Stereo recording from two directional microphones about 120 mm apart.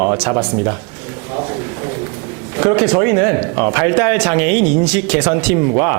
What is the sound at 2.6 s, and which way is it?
A man's voice, 15° right (ahead or behind).